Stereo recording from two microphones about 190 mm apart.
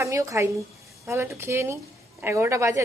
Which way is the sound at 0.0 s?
15° right (ahead or behind).